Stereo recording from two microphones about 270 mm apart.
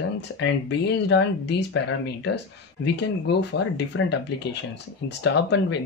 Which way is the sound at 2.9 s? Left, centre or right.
Left.